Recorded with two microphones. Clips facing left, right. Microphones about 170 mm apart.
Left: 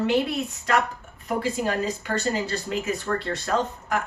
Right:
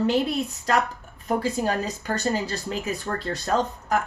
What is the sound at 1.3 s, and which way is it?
Speech, 35° right (ahead or behind).